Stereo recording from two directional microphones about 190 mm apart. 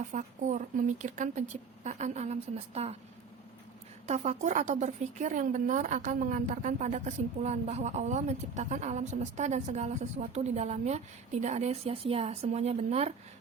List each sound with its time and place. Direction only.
0.1 s a woman's voice: 40° right (ahead or behind)
4.0 s a woman's voice: 35° right (ahead or behind)